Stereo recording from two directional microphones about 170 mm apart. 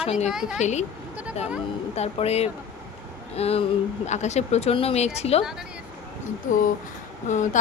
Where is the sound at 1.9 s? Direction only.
40° left (ahead or behind).